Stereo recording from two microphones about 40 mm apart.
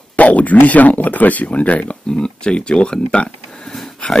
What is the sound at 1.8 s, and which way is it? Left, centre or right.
Speech, left.